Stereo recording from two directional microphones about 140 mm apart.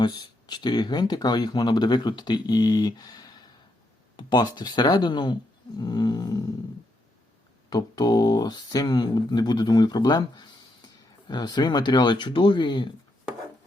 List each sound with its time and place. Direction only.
0.0 s speech: 30° left (ahead or behind)
7.7 s speech: 30° left (ahead or behind)